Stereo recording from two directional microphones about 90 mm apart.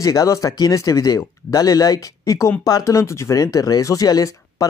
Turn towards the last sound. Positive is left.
turn(degrees=35)  # may be behind; listen again after turning